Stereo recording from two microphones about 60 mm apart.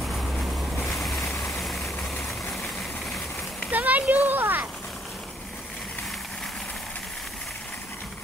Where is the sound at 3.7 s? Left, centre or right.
Right.